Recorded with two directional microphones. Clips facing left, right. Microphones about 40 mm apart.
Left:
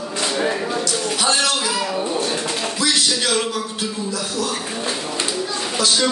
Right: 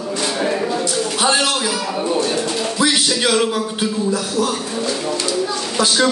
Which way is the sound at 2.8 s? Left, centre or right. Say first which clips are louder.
Right 4 dB; right.